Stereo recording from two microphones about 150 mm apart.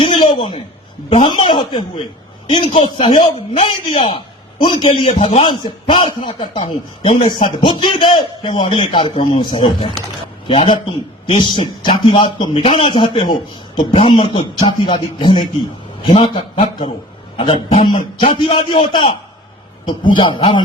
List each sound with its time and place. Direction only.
0.0 s a sound: 35° left (ahead or behind)
1.4 s a man's voice: 35° left (ahead or behind)
5.0 s speech: 50° left (ahead or behind)
5.4 s a man's voice: 35° left (ahead or behind)
6.6 s speech: 45° left (ahead or behind)
7.6 s a man's voice: 30° left (ahead or behind)